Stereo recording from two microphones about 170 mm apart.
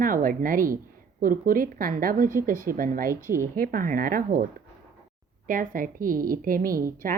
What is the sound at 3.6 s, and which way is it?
Speech, 55° right (ahead or behind).